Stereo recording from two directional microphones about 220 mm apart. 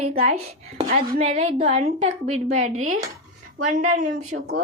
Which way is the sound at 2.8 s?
70° right (ahead or behind).